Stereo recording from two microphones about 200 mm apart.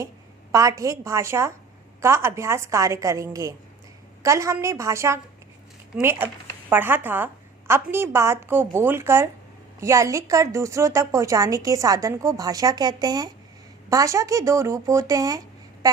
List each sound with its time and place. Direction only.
0.5 s a woman's voice: 15° right (ahead or behind)